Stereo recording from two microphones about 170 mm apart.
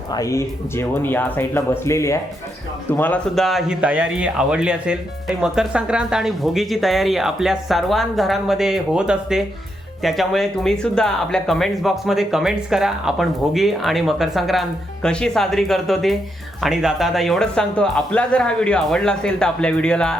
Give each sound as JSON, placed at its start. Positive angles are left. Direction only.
{"t": 0.1, "sound": "speech", "side_deg": 20}